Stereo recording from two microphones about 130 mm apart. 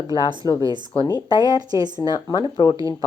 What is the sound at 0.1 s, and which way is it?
Speech, 35° left (ahead or behind).